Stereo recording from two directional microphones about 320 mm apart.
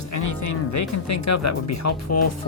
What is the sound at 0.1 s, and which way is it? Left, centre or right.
Speech, left.